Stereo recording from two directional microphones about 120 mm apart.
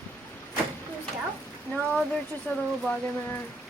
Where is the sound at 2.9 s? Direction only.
10° left (ahead or behind).